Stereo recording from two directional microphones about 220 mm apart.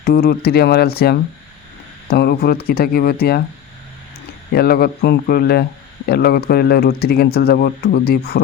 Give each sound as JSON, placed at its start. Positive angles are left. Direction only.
{"t": 0.0, "sound": "speech", "side_deg": 45}
{"t": 4.5, "sound": "speech", "side_deg": 45}